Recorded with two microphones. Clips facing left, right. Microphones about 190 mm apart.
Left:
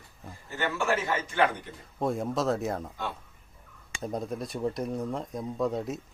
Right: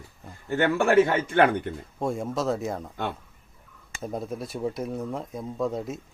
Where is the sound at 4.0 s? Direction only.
Centre (ahead or behind).